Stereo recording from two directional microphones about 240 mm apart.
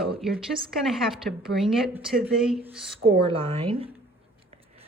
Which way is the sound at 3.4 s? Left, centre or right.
Right.